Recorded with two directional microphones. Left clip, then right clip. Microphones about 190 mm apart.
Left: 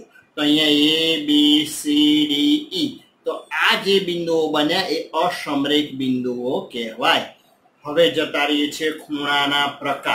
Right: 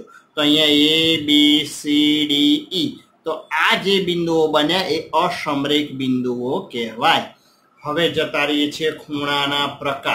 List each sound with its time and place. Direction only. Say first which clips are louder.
0.4 s speech: right 2 dB; 30° right (ahead or behind)